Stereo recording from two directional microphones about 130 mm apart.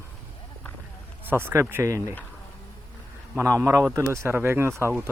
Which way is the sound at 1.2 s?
15° right (ahead or behind).